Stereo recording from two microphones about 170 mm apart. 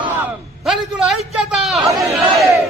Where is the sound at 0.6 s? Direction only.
Centre (ahead or behind).